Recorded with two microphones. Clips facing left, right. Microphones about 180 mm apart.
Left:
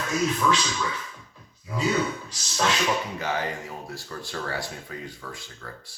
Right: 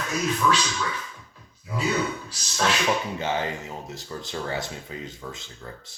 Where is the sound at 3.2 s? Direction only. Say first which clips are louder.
Right 1 dB; 25° right (ahead or behind).